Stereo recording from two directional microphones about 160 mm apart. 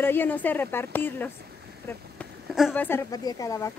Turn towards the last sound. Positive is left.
turn(degrees=20)  # may be behind; listen again after turning